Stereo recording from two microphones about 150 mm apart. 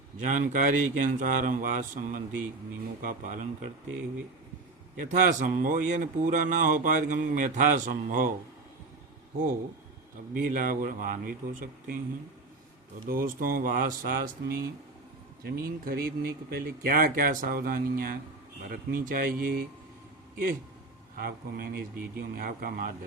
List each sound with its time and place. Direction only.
0.2 s speech: 60° right (ahead or behind)
5.0 s speech: 55° right (ahead or behind)
10.3 s speech: 65° right (ahead or behind)
13.1 s speech: 70° right (ahead or behind)
21.2 s speech: 85° right